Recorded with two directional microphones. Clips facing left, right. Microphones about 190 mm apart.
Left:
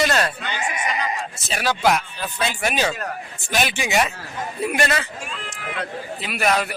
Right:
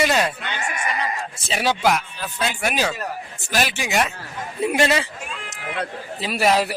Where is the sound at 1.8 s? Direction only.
Centre (ahead or behind).